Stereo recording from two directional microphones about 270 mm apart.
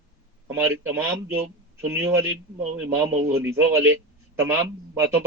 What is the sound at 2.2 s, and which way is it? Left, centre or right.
Speech, right.